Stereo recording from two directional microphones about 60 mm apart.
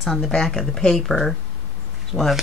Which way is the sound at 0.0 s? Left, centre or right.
Centre.